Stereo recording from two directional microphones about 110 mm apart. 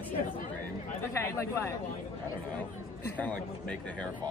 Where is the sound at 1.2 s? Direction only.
25° left (ahead or behind).